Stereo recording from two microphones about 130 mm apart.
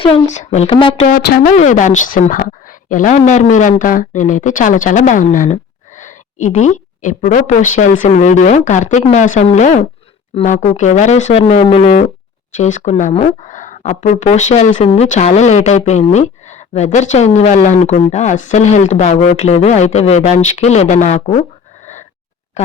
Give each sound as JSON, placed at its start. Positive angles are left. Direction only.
{"t": 0.3, "sound": "a woman's voice", "side_deg": 65}
{"t": 0.7, "sound": "speech", "side_deg": 40}
{"t": 1.0, "sound": "a woman's voice", "side_deg": 90}
{"t": 11.4, "sound": "speech", "side_deg": 45}
{"t": 12.5, "sound": "a woman's voice", "side_deg": 70}
{"t": 22.6, "sound": "speech", "side_deg": 60}